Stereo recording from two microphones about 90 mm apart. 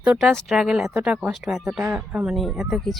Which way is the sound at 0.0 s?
5° right (ahead or behind).